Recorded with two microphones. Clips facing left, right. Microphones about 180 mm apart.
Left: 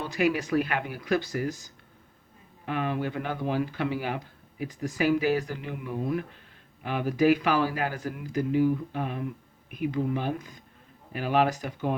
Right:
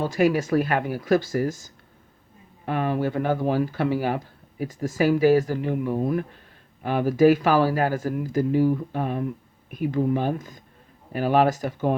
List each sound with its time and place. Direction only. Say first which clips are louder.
0.0 s speech: right 5 dB; 40° right (ahead or behind)